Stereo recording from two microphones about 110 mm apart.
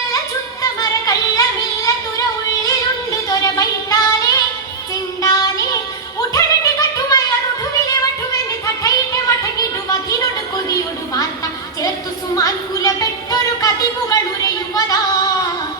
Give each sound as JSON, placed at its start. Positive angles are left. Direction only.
{"t": 0.6, "sound": "music", "side_deg": 30}
{"t": 8.6, "sound": "music", "side_deg": 30}
{"t": 12.4, "sound": "music", "side_deg": 35}